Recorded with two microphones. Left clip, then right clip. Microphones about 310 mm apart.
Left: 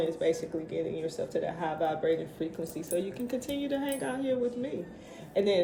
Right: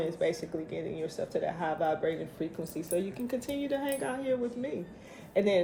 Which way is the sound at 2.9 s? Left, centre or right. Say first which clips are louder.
Even; right.